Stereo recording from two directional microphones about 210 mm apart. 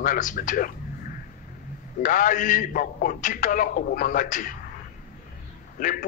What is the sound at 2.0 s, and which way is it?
A man's voice, 40° left (ahead or behind).